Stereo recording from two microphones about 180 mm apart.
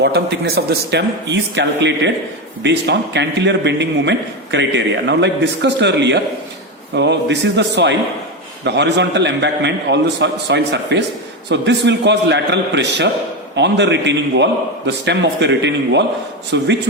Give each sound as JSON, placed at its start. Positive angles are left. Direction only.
{"t": 0.0, "sound": "a man's voice", "side_deg": -65}